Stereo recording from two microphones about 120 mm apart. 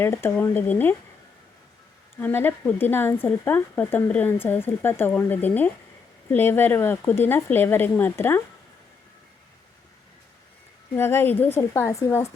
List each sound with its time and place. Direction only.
0.0 s speech: 20° left (ahead or behind)
2.1 s speech: 15° left (ahead or behind)
10.9 s a woman's voice: 20° left (ahead or behind)